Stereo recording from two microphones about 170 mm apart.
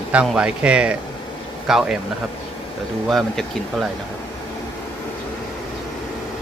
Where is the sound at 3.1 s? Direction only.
Centre (ahead or behind).